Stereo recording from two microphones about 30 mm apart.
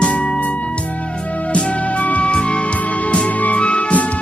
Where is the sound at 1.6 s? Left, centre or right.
Left.